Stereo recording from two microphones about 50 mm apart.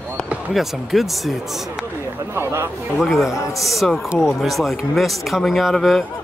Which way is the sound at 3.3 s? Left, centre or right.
Left.